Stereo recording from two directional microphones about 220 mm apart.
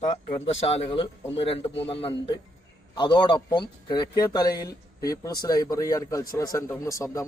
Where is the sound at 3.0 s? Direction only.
20° left (ahead or behind).